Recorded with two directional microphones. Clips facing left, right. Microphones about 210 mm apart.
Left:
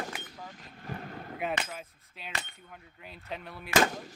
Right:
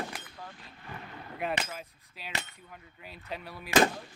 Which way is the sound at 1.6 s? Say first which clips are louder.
Even; centre (ahead or behind).